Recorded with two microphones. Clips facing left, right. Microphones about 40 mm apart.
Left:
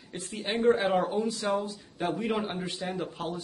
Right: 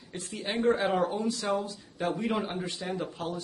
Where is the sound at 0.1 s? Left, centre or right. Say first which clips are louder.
Left 1 dB; centre.